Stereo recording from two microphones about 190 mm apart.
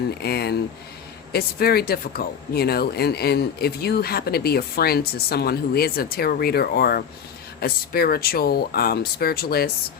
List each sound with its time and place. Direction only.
0.2 s speech: 55° left (ahead or behind)